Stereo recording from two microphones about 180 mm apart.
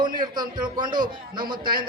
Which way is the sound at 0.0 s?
25° right (ahead or behind).